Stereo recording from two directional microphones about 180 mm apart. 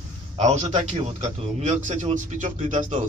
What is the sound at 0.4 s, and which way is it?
A man's voice, 40° right (ahead or behind).